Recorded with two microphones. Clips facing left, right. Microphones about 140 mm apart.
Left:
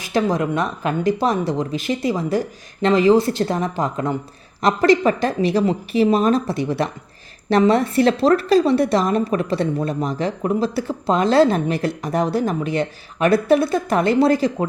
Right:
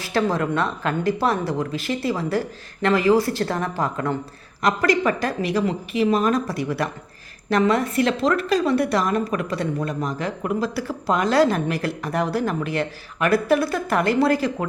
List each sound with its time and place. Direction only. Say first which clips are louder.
0.0 s a woman's voice: left 2 dB; 15° left (ahead or behind)